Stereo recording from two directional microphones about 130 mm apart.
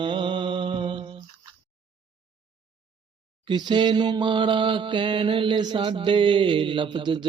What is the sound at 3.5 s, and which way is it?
Mantra, 35° right (ahead or behind).